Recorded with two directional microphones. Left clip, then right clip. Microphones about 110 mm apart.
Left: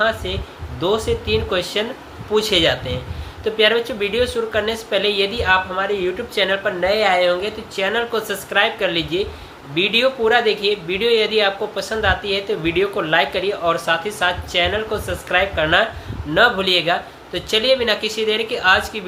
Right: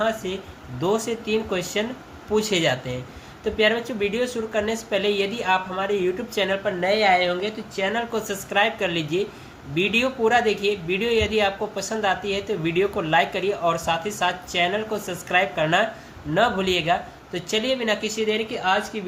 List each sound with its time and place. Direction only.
0.0 s speech: 15° right (ahead or behind)